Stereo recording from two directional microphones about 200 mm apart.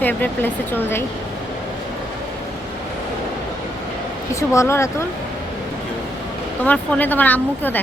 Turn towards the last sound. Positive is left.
turn(degrees=10)  # may be behind; listen again after turning